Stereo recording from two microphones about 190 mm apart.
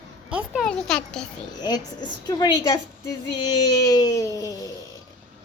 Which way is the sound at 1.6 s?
20° left (ahead or behind).